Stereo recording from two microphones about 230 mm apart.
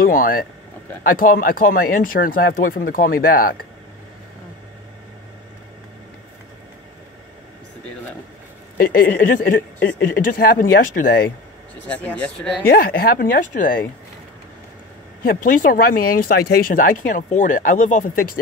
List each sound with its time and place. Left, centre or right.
0.0 s speech: left
8.7 s speech: left
11.9 s speech: centre
12.6 s speech: left
15.2 s speech: left